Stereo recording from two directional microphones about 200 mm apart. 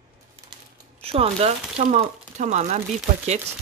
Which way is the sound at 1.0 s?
30° right (ahead or behind).